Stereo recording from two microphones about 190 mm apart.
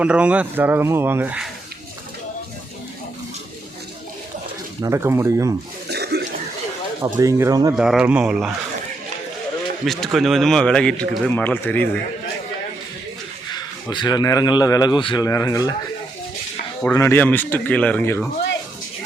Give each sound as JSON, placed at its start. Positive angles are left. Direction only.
{"t": 0.0, "sound": "speech", "side_deg": -5}
{"t": 4.8, "sound": "speech", "side_deg": -15}
{"t": 5.9, "sound": "throat clearing", "side_deg": -60}
{"t": 7.2, "sound": "speech", "side_deg": -15}
{"t": 7.8, "sound": "speech", "side_deg": -5}
{"t": 9.8, "sound": "speech", "side_deg": 0}
{"t": 13.5, "sound": "speech", "side_deg": 25}
{"t": 16.9, "sound": "a man's voice", "side_deg": 15}